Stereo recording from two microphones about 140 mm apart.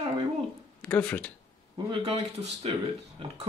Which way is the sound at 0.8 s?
10° left (ahead or behind).